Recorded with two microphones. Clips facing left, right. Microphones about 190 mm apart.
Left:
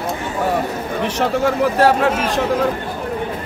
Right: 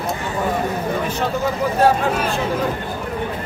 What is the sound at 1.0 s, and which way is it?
Speech, 75° left (ahead or behind).